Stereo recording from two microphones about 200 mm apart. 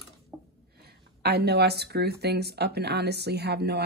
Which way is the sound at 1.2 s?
55° right (ahead or behind).